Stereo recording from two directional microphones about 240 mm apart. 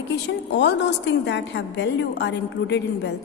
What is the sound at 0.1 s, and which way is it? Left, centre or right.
A woman's voice, left.